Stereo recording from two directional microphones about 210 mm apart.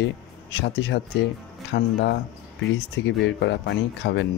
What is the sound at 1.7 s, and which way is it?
Speech, 50° left (ahead or behind).